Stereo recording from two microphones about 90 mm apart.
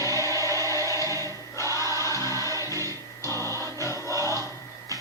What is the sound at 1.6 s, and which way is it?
Choir, 35° left (ahead or behind).